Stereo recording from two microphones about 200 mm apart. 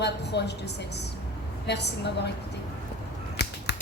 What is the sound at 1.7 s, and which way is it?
Speech, 55° left (ahead or behind).